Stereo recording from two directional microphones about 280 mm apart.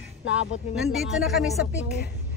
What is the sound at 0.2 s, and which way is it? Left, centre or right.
Speech, left.